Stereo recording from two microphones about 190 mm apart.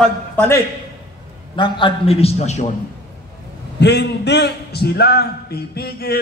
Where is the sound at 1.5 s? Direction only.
25° left (ahead or behind).